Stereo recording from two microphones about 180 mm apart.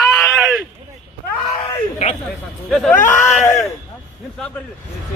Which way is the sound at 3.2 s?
15° left (ahead or behind).